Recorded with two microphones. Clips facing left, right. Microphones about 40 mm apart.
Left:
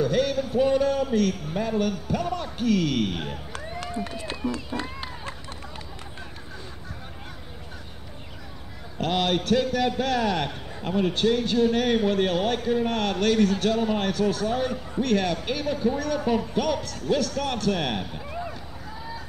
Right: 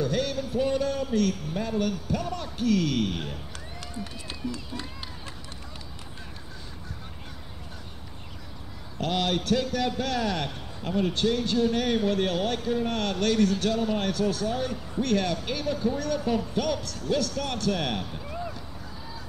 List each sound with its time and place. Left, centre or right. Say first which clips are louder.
0.0 s a man's voice: left 4 dB; centre
2.2 s a man's voice: left 2 dB; left
3.5 s run: left 7 dB; left
8.9 s a man's voice: left 3 dB; left
16.2 s a man's voice: left 3 dB; left
16.5 s a man's voice: left 2 dB; centre